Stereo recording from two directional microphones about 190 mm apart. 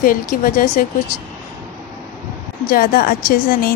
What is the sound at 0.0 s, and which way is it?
Speech, 50° left (ahead or behind).